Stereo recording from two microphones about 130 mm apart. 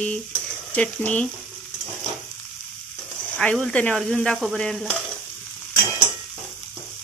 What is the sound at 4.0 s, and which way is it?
Stir, 5° left (ahead or behind).